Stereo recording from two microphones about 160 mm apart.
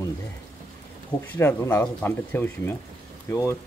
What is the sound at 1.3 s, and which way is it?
Speech, 10° left (ahead or behind).